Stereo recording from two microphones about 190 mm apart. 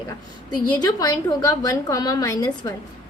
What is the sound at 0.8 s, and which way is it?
A woman's voice, 20° left (ahead or behind).